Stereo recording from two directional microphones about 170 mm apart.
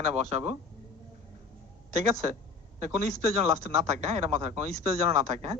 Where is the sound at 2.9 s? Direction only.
40° right (ahead or behind).